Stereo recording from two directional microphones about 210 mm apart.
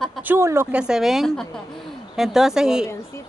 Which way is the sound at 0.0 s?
5° right (ahead or behind).